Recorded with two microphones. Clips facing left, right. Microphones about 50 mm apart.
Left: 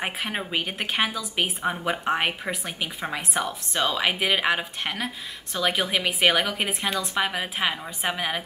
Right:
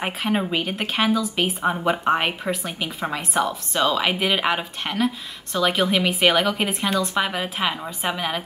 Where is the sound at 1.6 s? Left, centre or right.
Centre.